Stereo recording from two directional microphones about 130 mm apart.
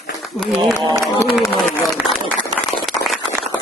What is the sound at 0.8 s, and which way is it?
Speech, 25° left (ahead or behind).